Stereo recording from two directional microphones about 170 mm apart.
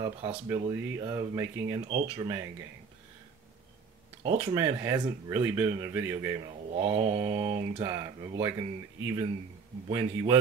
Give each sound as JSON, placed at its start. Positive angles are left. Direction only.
{"t": 0.5, "sound": "speech", "side_deg": -20}
{"t": 4.2, "sound": "mantra", "side_deg": -30}
{"t": 4.6, "sound": "speech", "side_deg": -15}
{"t": 6.7, "sound": "mantra", "side_deg": -35}
{"t": 7.8, "sound": "speech", "side_deg": -20}
{"t": 9.8, "sound": "mantra", "side_deg": -30}